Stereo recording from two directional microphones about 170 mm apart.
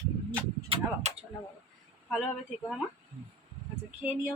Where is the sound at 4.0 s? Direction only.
10° right (ahead or behind).